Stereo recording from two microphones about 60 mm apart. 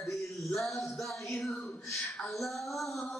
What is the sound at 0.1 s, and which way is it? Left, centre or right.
Music, centre.